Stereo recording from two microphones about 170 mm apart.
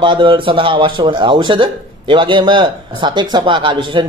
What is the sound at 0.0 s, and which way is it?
Speech, 30° right (ahead or behind).